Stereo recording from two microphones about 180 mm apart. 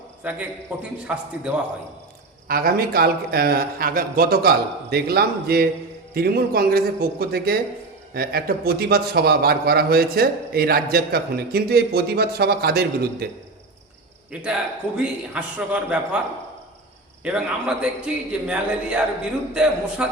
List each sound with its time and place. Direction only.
0.2 s a man's voice: 5° right (ahead or behind)
2.5 s a man's voice: 55° right (ahead or behind)
14.3 s a man's voice: 5° right (ahead or behind)
17.2 s a man's voice: 5° right (ahead or behind)